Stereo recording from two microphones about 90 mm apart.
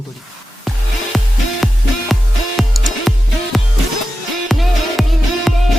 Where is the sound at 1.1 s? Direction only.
Centre (ahead or behind).